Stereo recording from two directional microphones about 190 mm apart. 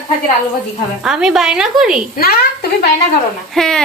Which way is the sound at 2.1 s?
55° left (ahead or behind).